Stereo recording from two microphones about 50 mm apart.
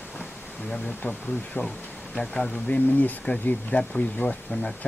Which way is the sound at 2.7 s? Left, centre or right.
Left.